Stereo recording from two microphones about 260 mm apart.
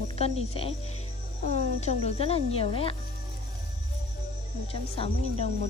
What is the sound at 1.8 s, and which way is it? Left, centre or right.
Speech, left.